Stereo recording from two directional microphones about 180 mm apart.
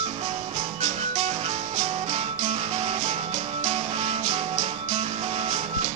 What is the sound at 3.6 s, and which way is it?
Music, 35° right (ahead or behind).